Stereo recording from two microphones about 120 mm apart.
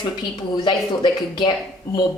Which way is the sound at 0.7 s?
40° left (ahead or behind).